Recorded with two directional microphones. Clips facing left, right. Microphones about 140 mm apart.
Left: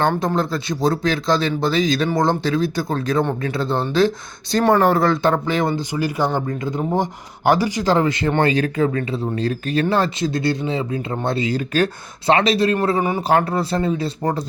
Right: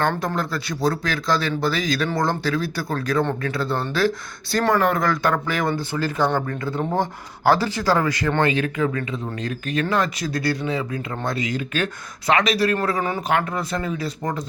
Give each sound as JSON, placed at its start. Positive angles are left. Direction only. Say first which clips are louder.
{"t": 0.0, "sound": "speech", "louder": "left 4 dB", "side_deg": 20}
{"t": 13.2, "sound": "speech", "louder": "left 5 dB", "side_deg": 35}